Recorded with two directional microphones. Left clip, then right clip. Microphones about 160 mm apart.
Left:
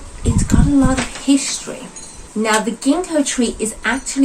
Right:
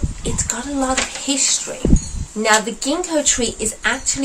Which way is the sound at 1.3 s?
15° right (ahead or behind).